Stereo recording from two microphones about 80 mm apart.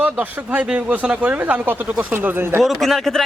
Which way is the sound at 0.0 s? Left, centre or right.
Centre.